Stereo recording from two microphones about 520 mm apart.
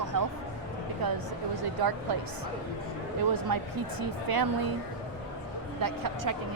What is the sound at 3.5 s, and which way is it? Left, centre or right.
Speech, right.